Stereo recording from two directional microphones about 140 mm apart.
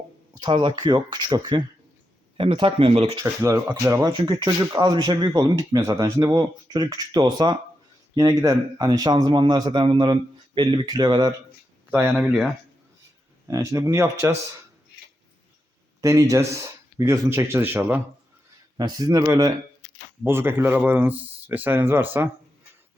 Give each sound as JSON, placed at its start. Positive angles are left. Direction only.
{"t": 0.3, "sound": "a man's voice", "side_deg": -30}
{"t": 3.8, "sound": "a man's voice", "side_deg": -25}
{"t": 11.9, "sound": "speech", "side_deg": -10}
{"t": 12.1, "sound": "speech", "side_deg": 0}
{"t": 13.5, "sound": "speech", "side_deg": -20}
{"t": 16.0, "sound": "speech", "side_deg": -25}
{"t": 18.8, "sound": "speech", "side_deg": -25}